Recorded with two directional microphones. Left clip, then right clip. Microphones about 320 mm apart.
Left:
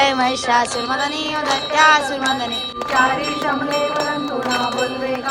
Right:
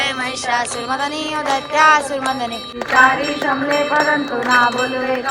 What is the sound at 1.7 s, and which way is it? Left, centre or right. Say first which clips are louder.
Music: right 1 dB; centre.